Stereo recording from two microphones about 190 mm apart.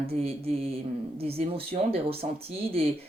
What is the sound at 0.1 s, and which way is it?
Speech, 30° right (ahead or behind).